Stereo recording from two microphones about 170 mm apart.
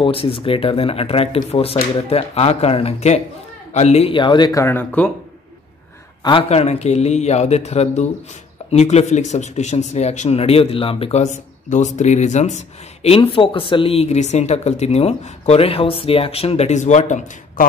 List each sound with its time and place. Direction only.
0.0 s speech: 35° left (ahead or behind); by 5.1 s 10° left (ahead or behind)
6.2 s speech: 35° left (ahead or behind)